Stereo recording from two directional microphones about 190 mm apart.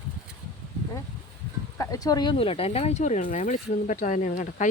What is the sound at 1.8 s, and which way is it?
Speech, 20° left (ahead or behind).